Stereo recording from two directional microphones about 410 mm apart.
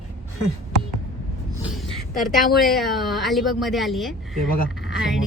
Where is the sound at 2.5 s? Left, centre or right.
Centre.